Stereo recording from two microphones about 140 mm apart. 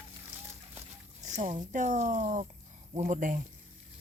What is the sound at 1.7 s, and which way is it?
Speech, 60° right (ahead or behind).